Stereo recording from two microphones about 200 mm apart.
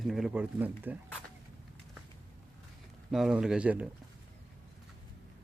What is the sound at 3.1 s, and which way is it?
Speech, centre (ahead or behind).